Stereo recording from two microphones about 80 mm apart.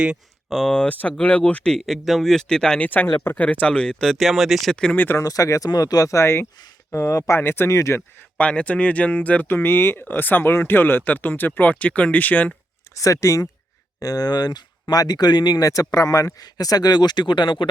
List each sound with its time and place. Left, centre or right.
0.5 s speech: centre
1.8 s speech: centre
2.8 s speech: left
4.9 s speech: left
5.2 s speech: left
8.4 s speech: centre
12.9 s speech: left